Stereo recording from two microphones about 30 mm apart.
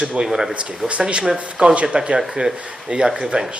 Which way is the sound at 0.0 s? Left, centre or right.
Centre.